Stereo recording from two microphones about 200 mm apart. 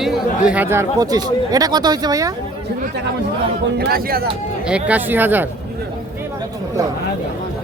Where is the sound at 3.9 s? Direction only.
50° right (ahead or behind).